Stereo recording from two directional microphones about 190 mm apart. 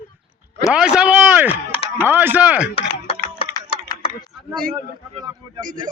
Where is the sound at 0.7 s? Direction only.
5° right (ahead or behind).